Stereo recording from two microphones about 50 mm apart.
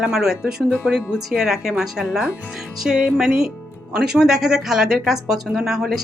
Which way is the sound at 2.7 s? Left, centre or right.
Centre.